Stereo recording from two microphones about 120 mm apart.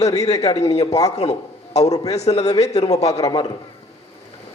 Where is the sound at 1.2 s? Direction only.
60° left (ahead or behind).